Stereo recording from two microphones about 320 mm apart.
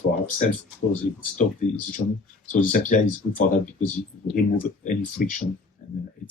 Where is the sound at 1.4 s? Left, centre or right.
Left.